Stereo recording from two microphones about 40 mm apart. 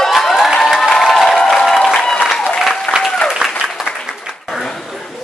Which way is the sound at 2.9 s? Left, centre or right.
Right.